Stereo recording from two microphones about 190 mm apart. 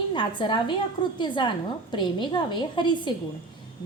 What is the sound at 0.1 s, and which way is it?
A woman's voice, 25° left (ahead or behind).